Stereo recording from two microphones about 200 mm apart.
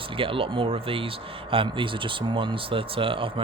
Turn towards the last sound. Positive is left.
turn(degrees=-25)  # may be behind; listen again after turning